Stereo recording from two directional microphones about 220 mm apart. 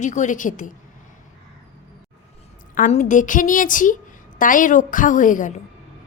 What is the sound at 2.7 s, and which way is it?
A woman's voice, 35° left (ahead or behind).